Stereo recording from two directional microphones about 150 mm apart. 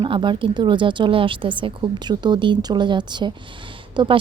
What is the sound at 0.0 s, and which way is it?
A woman's voice, 35° right (ahead or behind).